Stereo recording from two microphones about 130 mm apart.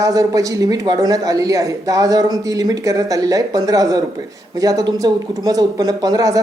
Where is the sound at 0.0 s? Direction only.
25° right (ahead or behind).